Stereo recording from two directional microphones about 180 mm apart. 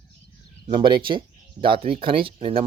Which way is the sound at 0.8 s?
25° right (ahead or behind).